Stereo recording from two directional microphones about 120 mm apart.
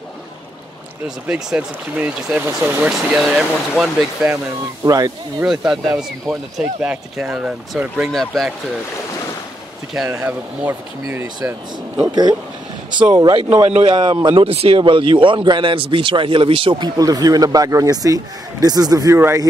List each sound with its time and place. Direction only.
1.0 s speech: 5° right (ahead or behind)
2.9 s speech: 5° right (ahead or behind)
4.8 s speech: 30° right (ahead or behind)
5.4 s speech: 5° right (ahead or behind)
10.0 s speech: 15° right (ahead or behind)
12.1 s a man's voice: 35° right (ahead or behind)
13.7 s a man's voice: 60° right (ahead or behind)
13.9 s speech: 40° right (ahead or behind)
14.8 s a man's voice: 45° right (ahead or behind)
19.1 s speech: 20° right (ahead or behind)